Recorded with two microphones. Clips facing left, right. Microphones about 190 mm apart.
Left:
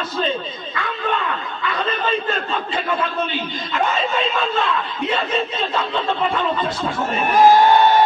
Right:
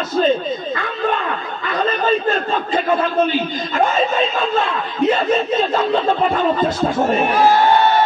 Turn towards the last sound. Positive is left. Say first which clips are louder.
# right 6 dB
turn(degrees=-45)  # may be behind; listen again after turning